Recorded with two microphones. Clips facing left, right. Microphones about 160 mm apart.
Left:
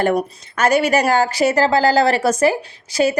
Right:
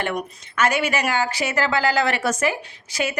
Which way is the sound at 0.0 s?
35° left (ahead or behind).